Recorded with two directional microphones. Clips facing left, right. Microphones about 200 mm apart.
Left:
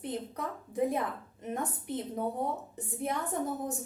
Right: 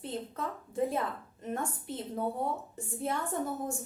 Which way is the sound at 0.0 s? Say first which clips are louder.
Left 1 dB; 20° left (ahead or behind).